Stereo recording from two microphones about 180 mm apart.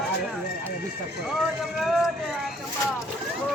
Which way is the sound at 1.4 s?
Centre (ahead or behind).